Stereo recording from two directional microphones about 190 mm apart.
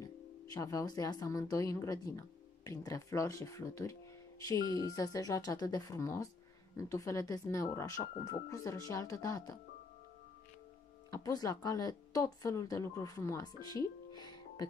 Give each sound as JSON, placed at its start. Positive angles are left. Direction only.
{"t": 0.0, "sound": "speech", "side_deg": 20}
{"t": 11.1, "sound": "speech", "side_deg": 20}